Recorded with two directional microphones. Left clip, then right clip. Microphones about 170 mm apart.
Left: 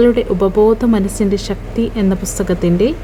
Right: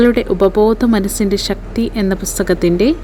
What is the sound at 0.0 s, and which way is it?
Speech, 45° right (ahead or behind).